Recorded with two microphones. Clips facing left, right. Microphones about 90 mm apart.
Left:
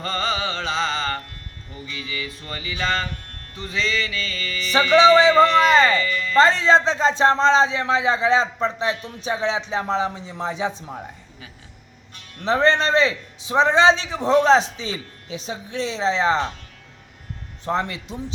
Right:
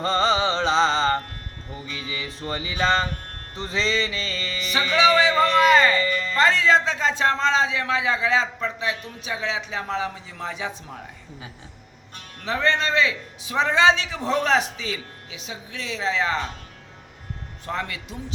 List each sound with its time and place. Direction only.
0.0 s music: 30° right (ahead or behind)
1.7 s speech: 30° right (ahead or behind)
4.7 s a man's voice: 35° left (ahead or behind)
6.0 s music: 35° right (ahead or behind)
6.3 s a man's voice: 30° left (ahead or behind)
12.4 s a man's voice: 30° left (ahead or behind)
17.7 s a man's voice: 25° left (ahead or behind)